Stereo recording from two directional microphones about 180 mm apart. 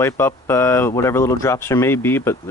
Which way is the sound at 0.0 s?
15° left (ahead or behind).